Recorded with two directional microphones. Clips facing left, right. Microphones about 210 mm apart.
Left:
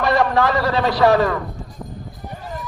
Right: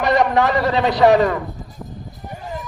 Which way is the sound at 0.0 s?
20° right (ahead or behind).